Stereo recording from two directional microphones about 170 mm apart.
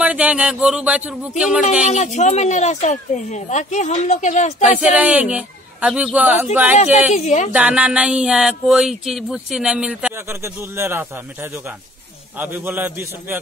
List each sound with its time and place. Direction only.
0.0 s speech: 5° right (ahead or behind)
1.9 s speech: 45° left (ahead or behind)
4.6 s a man's voice: 5° right (ahead or behind)
7.2 s a woman's voice: 40° left (ahead or behind)
7.5 s speech: 5° right (ahead or behind)
12.4 s a man's voice: 10° right (ahead or behind)